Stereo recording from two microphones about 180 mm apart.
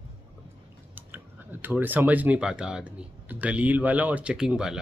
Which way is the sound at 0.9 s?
10° right (ahead or behind).